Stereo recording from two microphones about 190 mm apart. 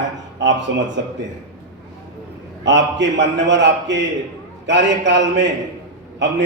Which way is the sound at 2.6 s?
70° right (ahead or behind).